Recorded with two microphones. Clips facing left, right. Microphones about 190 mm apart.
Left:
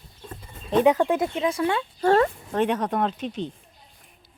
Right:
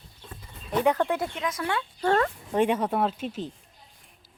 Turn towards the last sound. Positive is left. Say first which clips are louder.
# left 1 dB
turn(degrees=-5)  # may be behind; listen again after turning